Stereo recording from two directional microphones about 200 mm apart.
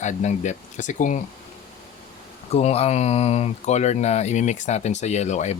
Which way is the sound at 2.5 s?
30° left (ahead or behind).